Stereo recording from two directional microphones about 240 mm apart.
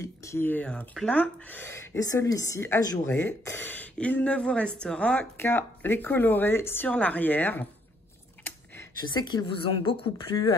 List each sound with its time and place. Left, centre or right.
0.0 s speech: centre
9.0 s a woman's voice: centre